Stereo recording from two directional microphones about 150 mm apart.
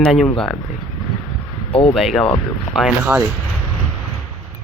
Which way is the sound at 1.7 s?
40° left (ahead or behind).